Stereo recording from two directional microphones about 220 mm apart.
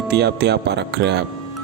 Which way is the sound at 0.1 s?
50° right (ahead or behind).